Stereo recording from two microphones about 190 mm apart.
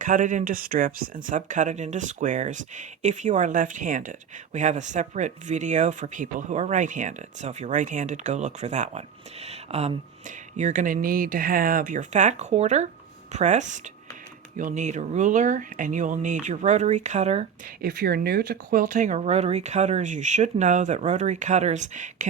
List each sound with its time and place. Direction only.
0.0 s speech: 45° right (ahead or behind)
17.7 s speech: 50° right (ahead or behind)